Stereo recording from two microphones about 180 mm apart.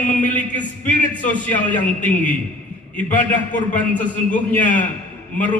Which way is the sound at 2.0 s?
45° left (ahead or behind).